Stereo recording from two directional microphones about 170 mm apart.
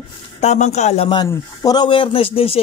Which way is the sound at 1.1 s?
25° left (ahead or behind).